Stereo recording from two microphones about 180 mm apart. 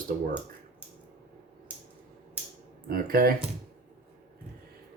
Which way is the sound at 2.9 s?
55° right (ahead or behind).